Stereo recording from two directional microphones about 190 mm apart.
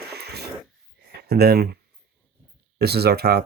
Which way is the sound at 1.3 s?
55° right (ahead or behind).